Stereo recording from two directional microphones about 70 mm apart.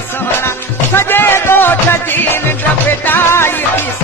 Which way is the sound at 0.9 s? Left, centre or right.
Left.